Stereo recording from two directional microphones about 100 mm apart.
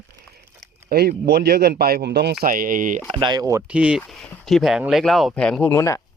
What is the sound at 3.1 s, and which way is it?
Speech, 50° right (ahead or behind).